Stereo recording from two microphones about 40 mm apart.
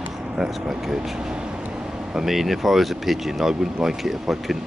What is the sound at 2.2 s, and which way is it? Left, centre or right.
Speech, centre.